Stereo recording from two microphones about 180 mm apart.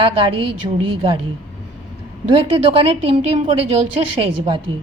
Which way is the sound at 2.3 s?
30° right (ahead or behind).